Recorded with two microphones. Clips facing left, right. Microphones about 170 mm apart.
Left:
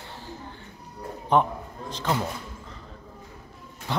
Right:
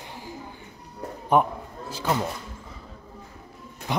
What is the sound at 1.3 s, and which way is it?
Speech, 10° right (ahead or behind).